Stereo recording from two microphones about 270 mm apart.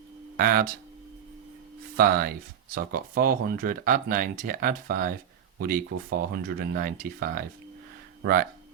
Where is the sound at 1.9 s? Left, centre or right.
Right.